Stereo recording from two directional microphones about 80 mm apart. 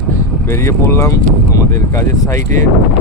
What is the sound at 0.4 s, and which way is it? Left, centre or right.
Speech, left.